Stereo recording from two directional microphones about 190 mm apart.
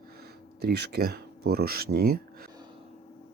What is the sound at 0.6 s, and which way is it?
Speech, 60° right (ahead or behind).